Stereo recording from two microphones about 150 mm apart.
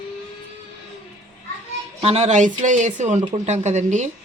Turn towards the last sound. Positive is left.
turn(degrees=-50)  # may be behind; listen again after turning